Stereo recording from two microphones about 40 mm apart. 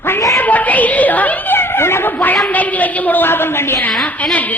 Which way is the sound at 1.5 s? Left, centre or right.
Left.